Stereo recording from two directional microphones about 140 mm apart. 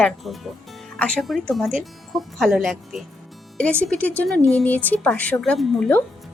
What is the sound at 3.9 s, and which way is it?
A woman's voice, 10° left (ahead or behind).